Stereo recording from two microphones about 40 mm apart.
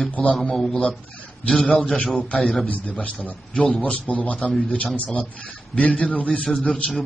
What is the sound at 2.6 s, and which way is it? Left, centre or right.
Speech, left.